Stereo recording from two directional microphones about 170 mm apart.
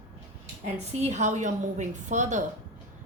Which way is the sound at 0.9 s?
45° right (ahead or behind).